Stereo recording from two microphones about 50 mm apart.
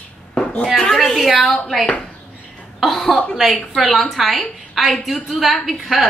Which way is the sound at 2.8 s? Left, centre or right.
Centre.